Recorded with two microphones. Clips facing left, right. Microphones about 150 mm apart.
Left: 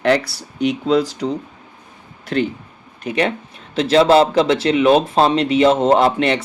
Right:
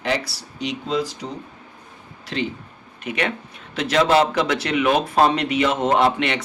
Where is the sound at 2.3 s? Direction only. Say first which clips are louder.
Left 7 dB; 55° left (ahead or behind).